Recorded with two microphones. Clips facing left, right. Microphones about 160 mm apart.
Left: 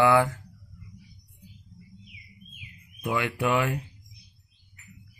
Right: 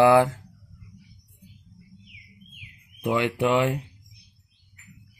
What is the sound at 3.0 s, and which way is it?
Speech, 25° right (ahead or behind).